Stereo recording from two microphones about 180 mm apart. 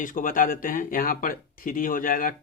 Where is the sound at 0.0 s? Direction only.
50° left (ahead or behind).